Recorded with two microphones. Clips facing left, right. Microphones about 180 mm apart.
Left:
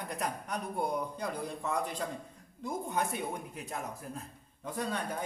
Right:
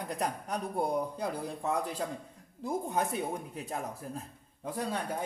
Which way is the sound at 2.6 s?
30° right (ahead or behind).